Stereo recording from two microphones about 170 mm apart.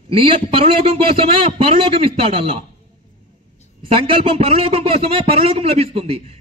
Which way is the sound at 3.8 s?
35° right (ahead or behind).